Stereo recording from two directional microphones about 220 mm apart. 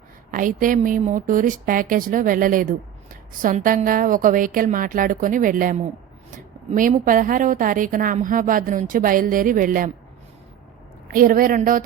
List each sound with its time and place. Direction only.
0.3 s a woman's voice: 35° right (ahead or behind)
11.1 s a woman's voice: 40° right (ahead or behind)